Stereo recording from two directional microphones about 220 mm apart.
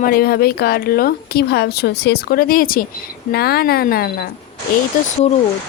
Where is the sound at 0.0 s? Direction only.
40° left (ahead or behind).